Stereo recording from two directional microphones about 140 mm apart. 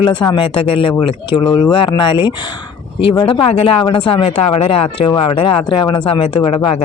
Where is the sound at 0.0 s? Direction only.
35° left (ahead or behind).